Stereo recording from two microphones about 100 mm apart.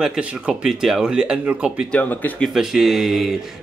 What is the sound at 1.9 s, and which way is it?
Speech, 15° left (ahead or behind).